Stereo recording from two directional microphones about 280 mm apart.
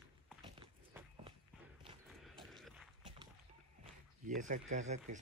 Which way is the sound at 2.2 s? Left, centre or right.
Centre.